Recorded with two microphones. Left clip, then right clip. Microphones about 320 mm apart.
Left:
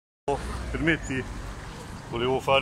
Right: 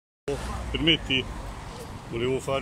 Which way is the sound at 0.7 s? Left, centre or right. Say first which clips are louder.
Right 2 dB; centre.